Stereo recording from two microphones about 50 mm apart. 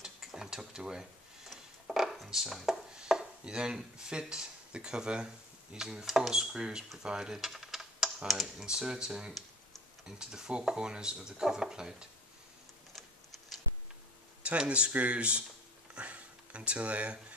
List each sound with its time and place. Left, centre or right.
0.0 s stir: centre
1.5 s a sound: centre
3.0 s chopping: centre
7.0 s typing: centre
8.5 s speech: centre
14.7 s speech: right
15.9 s a sound: right